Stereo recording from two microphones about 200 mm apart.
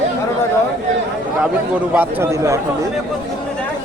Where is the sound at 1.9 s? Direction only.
15° right (ahead or behind).